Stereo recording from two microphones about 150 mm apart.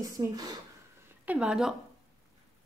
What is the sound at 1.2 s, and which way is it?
Speech, 10° right (ahead or behind).